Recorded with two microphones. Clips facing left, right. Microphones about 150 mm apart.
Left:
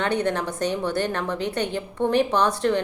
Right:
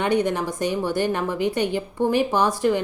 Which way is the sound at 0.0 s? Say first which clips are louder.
Right 2 dB; 10° right (ahead or behind).